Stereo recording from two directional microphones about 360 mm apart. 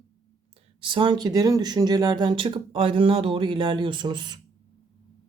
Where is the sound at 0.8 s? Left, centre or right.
Centre.